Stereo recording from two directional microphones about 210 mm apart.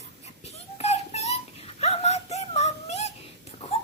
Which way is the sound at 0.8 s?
30° left (ahead or behind).